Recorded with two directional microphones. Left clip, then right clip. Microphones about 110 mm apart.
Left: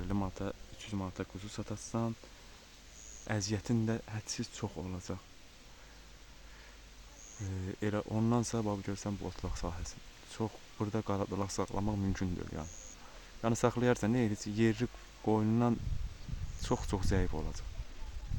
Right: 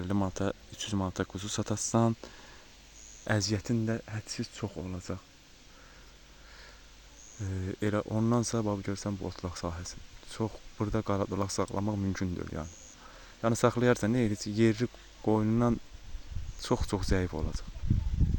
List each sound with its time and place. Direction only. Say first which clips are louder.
0.0 s speech: right 6 dB; 45° right (ahead or behind); by 2.1 s 90° right
3.3 s speech: right 5 dB; 40° right (ahead or behind)
3.6 s speech: right 3 dB; 25° right (ahead or behind)
7.3 s speech: right 5 dB; 30° right (ahead or behind)
16.6 s speech: right 4 dB; 30° right (ahead or behind)